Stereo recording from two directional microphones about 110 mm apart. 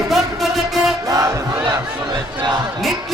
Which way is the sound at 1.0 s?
30° right (ahead or behind).